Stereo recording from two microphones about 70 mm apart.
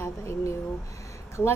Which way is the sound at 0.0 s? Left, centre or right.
Left.